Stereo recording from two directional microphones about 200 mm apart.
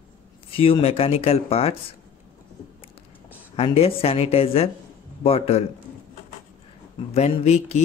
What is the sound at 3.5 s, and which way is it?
Speech, 30° left (ahead or behind).